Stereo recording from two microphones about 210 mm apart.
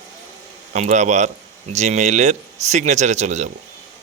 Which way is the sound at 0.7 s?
35° right (ahead or behind).